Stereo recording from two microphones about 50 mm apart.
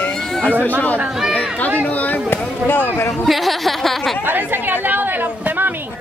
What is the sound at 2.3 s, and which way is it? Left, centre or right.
Speech, left.